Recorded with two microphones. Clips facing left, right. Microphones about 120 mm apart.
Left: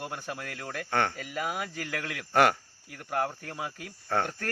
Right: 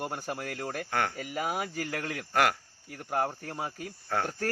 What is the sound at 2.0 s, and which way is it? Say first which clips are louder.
Speech: right 2 dB; 40° right (ahead or behind).